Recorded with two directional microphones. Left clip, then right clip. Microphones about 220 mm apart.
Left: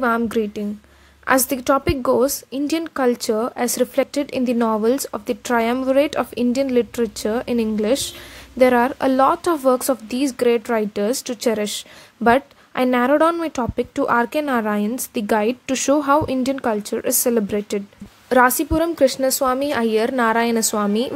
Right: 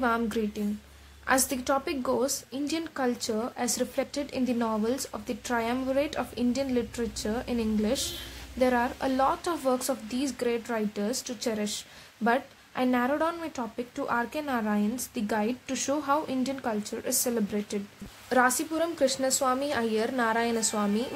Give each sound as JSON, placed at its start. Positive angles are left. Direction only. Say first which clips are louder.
{"t": 0.0, "sound": "a woman's voice", "louder": "left 8 dB", "side_deg": 30}